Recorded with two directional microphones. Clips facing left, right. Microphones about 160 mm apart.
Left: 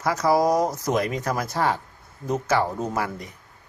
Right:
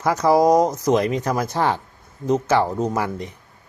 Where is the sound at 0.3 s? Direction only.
20° right (ahead or behind).